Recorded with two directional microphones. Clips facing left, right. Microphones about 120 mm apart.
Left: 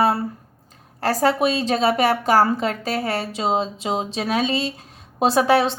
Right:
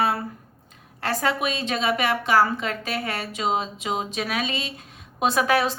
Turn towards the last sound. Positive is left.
turn(degrees=30)  # may be behind; listen again after turning